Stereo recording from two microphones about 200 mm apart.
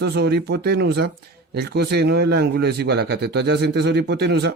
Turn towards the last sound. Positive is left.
turn(degrees=-55)  # may be behind; listen again after turning